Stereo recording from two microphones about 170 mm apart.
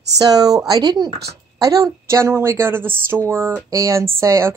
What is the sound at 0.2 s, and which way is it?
A woman's voice, 20° right (ahead or behind).